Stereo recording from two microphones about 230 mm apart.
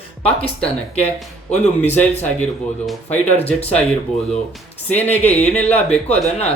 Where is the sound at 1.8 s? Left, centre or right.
Centre.